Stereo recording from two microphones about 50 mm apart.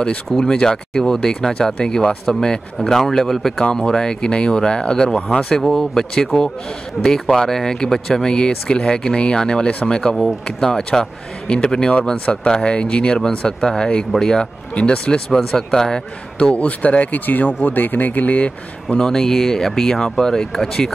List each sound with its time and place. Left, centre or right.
0.3 s speech: centre
16.3 s speech: left
18.9 s speech: centre